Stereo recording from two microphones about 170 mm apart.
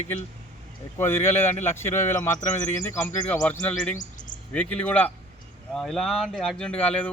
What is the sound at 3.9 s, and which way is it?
Bird, 50° left (ahead or behind).